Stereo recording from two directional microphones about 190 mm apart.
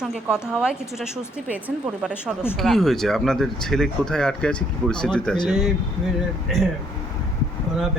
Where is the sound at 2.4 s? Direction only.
10° left (ahead or behind).